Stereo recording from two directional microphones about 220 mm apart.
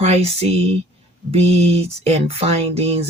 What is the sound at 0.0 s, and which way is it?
Speech, 30° right (ahead or behind).